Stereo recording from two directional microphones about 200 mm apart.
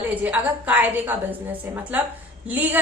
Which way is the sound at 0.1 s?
10° right (ahead or behind).